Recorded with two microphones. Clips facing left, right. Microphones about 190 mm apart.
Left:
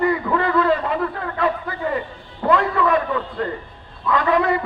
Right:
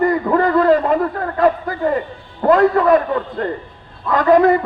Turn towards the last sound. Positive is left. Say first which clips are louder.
# right 6 dB
turn(degrees=-40)  # may be behind; listen again after turning